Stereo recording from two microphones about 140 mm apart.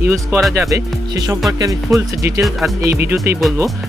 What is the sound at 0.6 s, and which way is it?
Speech, 25° right (ahead or behind).